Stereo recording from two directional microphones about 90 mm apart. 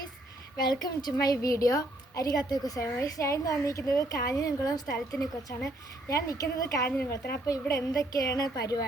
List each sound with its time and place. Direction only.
0.5 s a woman's voice: 50° left (ahead or behind)
6.8 s speech: 20° left (ahead or behind)
7.1 s a woman's voice: 40° left (ahead or behind)